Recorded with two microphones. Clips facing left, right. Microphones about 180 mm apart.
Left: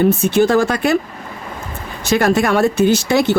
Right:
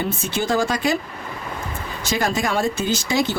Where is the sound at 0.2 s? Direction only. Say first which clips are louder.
Left 8 dB; 60° left (ahead or behind).